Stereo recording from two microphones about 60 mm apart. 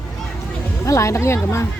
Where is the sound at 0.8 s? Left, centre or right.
Left.